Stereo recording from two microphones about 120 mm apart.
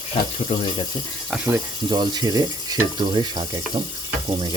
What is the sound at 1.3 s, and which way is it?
Speech, 15° right (ahead or behind).